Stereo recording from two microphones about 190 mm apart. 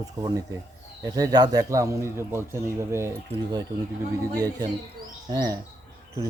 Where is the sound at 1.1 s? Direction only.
20° right (ahead or behind).